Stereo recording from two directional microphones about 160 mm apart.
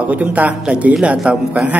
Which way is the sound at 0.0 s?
10° right (ahead or behind).